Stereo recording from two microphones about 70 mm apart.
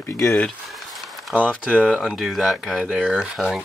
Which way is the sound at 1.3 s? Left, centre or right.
Centre.